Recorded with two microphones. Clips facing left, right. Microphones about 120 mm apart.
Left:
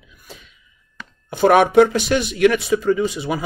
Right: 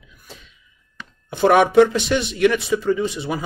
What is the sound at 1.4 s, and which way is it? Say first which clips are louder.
Speech: left 1 dB; 45° left (ahead or behind).